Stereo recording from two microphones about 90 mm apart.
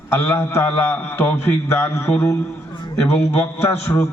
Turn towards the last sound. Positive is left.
turn(degrees=30)  # may be behind; listen again after turning